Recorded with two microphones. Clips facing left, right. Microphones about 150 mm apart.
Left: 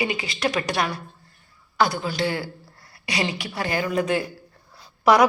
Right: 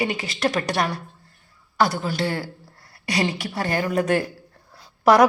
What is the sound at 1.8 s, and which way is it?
Speech, 40° right (ahead or behind).